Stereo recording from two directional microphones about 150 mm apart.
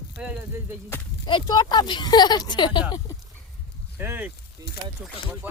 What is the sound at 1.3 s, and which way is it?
Speech, 30° left (ahead or behind).